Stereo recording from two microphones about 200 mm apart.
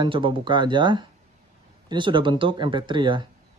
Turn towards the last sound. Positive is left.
turn(degrees=-25)  # may be behind; listen again after turning